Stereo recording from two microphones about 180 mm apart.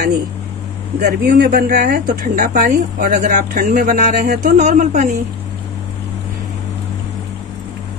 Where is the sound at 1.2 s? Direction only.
60° right (ahead or behind); by 5.1 s 45° right (ahead or behind).